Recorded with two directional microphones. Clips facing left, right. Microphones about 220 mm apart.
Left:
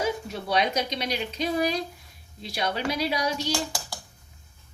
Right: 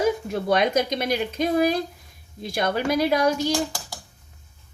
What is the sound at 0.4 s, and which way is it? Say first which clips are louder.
A woman's voice: right 5 dB; 50° right (ahead or behind).